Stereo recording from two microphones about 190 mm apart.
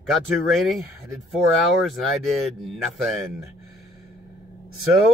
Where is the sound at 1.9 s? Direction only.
Centre (ahead or behind).